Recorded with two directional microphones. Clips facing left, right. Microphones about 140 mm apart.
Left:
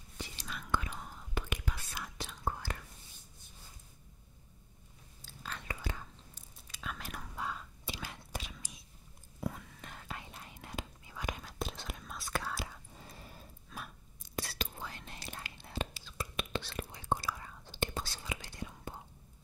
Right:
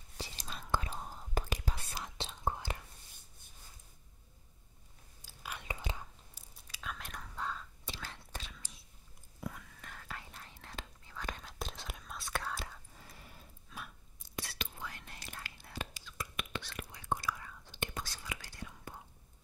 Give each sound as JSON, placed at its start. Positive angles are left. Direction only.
{"t": 0.2, "sound": "whispering", "side_deg": -30}
{"t": 5.2, "sound": "whispering", "side_deg": -10}
{"t": 6.9, "sound": "whispering", "side_deg": 5}
{"t": 9.4, "sound": "whispering", "side_deg": 30}
{"t": 12.9, "sound": "whispering", "side_deg": 25}